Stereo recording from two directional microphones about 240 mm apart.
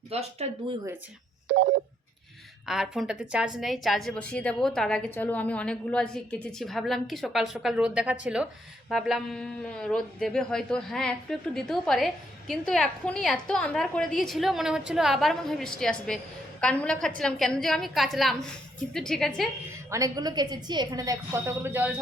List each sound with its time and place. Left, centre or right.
0.1 s speech: right
1.5 s telephone dialing: right
2.6 s speech: centre
19.7 s a woman's voice: centre